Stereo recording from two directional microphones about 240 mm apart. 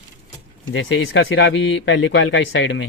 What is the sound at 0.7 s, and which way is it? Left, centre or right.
A man's voice, left.